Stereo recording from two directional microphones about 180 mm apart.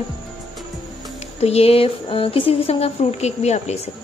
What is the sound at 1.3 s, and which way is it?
A woman's voice, 35° left (ahead or behind).